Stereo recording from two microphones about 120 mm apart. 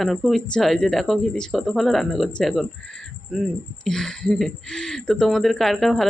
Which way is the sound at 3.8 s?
5° left (ahead or behind).